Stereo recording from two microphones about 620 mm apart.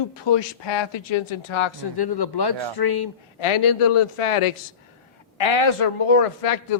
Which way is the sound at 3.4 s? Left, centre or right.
Left.